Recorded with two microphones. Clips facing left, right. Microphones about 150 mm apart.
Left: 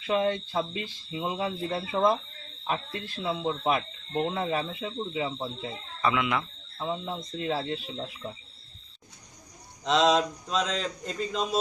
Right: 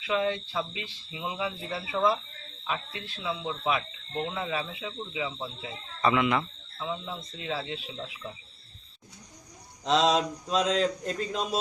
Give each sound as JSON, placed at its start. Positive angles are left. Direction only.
{"t": 0.0, "sound": "speech", "side_deg": 45}
{"t": 6.0, "sound": "speech", "side_deg": 0}
{"t": 6.7, "sound": "speech", "side_deg": 40}
{"t": 9.8, "sound": "speech", "side_deg": 0}